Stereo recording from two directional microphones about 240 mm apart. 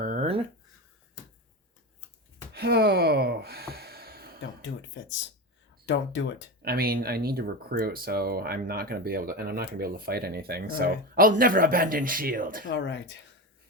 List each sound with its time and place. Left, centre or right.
0.0 s a sound: right
2.5 s gasp: right
4.6 s speech: left
6.6 s speech: right
12.6 s speech: left